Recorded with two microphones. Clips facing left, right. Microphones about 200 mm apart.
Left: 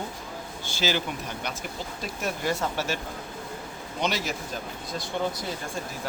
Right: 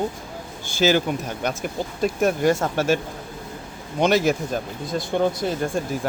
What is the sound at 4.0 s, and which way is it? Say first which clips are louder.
Speech: right 11 dB; 50° right (ahead or behind).